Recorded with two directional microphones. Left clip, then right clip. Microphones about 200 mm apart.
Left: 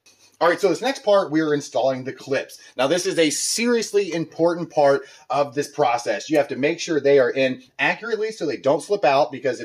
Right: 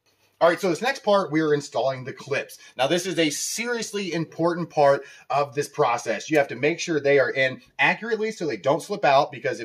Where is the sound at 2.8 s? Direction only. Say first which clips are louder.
Left 3 dB; 30° left (ahead or behind).